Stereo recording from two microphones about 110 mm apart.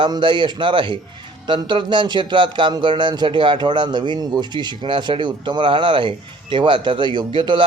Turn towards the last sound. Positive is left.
turn(degrees=-50)  # may be behind; listen again after turning